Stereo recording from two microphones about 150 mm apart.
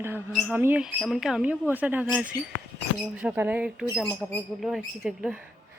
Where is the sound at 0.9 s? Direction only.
Centre (ahead or behind).